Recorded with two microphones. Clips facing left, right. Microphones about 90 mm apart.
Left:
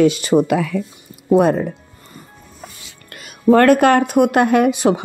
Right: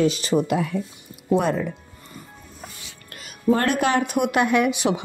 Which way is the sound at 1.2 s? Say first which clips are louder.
Left 7 dB; 50° left (ahead or behind).